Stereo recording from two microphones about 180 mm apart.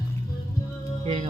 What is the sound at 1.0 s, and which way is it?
Music, 30° right (ahead or behind).